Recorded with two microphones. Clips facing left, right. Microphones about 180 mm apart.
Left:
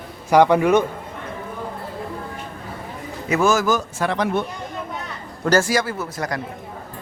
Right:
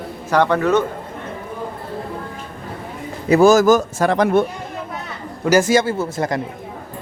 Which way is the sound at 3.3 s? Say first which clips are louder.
Right 7 dB; 35° right (ahead or behind).